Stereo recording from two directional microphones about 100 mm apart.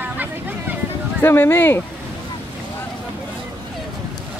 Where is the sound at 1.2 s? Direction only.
25° left (ahead or behind).